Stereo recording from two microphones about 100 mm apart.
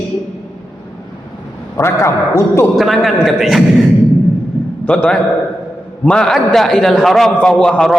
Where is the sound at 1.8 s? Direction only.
30° left (ahead or behind).